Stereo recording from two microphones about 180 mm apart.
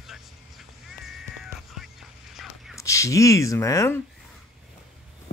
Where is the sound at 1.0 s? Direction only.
Centre (ahead or behind).